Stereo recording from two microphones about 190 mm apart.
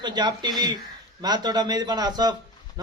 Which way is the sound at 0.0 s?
25° right (ahead or behind).